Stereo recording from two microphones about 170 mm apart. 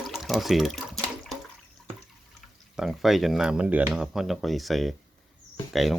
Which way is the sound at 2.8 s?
Centre (ahead or behind).